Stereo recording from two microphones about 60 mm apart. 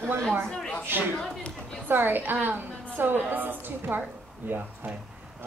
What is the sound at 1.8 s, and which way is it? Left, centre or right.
A woman's voice, right.